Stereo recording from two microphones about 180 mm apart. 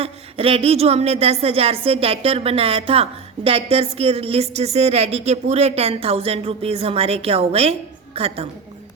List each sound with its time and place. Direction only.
0.0 s speech: 30° right (ahead or behind)